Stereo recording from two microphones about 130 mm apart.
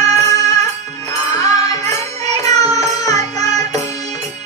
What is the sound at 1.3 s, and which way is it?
Music, 25° left (ahead or behind).